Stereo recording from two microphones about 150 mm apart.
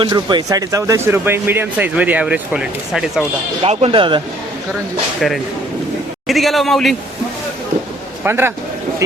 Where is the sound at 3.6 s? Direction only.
40° right (ahead or behind).